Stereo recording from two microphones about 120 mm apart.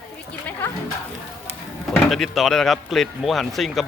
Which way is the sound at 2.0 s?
Centre (ahead or behind).